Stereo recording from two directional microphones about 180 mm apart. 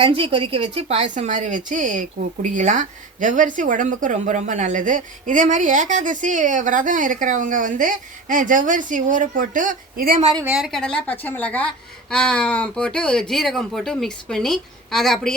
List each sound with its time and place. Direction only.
0.0 s a woman's voice: 30° right (ahead or behind); by 10.2 s 50° right (ahead or behind)
10.4 s a woman's voice: 5° right (ahead or behind)